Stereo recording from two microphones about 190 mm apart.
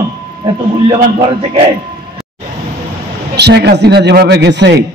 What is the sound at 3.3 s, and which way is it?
A man's voice, 60° right (ahead or behind).